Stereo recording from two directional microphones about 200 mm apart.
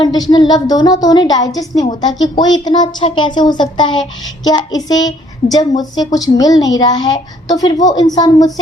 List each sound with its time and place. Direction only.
0.0 s a woman's voice: 20° left (ahead or behind)